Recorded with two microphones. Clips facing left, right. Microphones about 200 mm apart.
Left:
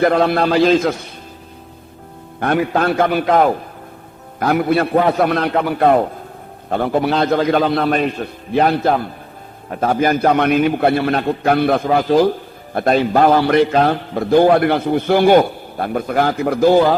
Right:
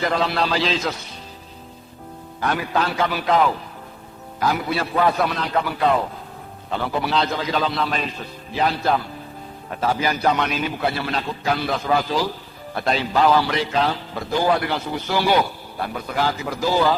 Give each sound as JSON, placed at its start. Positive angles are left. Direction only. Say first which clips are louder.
{"t": 0.0, "sound": "a man's voice", "louder": "left 8 dB", "side_deg": 55}
{"t": 2.4, "sound": "a man's voice", "louder": "left 6 dB", "side_deg": 55}